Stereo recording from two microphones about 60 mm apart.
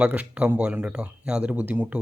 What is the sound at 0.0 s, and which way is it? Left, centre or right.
Speech, right.